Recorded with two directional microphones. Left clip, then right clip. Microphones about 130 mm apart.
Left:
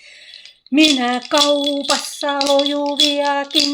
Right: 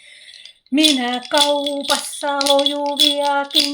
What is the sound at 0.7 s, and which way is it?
Speech, 30° left (ahead or behind).